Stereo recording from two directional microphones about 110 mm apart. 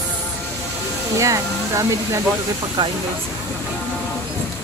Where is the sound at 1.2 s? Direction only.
30° right (ahead or behind).